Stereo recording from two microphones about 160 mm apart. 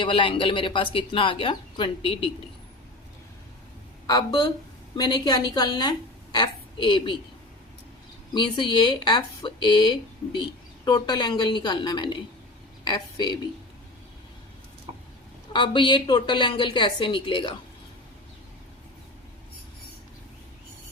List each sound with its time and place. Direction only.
0.0 s a woman's voice: 35° left (ahead or behind)
4.0 s a woman's voice: 25° left (ahead or behind)
8.3 s a woman's voice: 30° left (ahead or behind)
15.5 s a woman's voice: 30° left (ahead or behind)